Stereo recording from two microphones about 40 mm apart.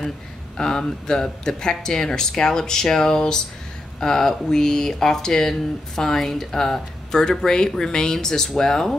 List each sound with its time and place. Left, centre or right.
0.6 s speech: centre